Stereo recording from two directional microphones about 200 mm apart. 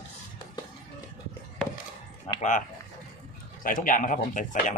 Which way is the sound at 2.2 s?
35° left (ahead or behind).